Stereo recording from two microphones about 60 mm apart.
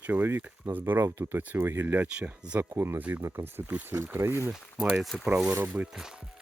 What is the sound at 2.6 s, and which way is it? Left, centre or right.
Speech, right.